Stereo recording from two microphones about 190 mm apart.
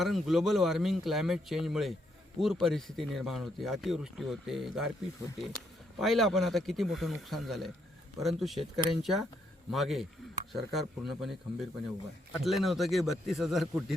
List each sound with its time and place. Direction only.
0.0 s speech: centre (ahead or behind)